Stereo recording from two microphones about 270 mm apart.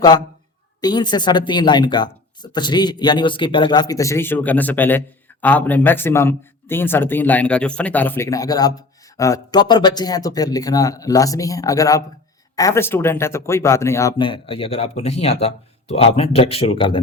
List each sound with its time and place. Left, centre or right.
0.8 s speech: centre